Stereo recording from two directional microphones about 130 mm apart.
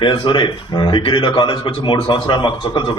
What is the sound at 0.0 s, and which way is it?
A man's voice, 40° left (ahead or behind).